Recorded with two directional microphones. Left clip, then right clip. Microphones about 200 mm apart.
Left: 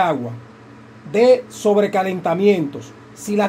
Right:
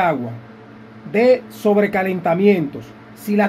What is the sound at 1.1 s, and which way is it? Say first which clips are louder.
Speech: left 1 dB; 15° left (ahead or behind).